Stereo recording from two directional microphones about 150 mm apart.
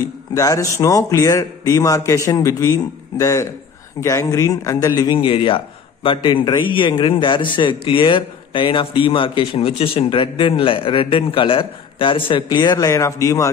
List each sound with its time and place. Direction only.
0.3 s a man's voice: 20° left (ahead or behind)